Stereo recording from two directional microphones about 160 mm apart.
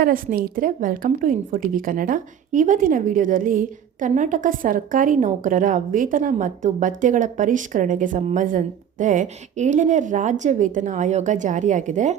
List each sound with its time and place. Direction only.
0.0 s a woman's voice: 65° right (ahead or behind)